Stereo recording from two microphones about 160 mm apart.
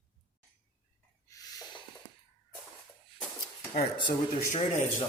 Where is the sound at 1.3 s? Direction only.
25° left (ahead or behind).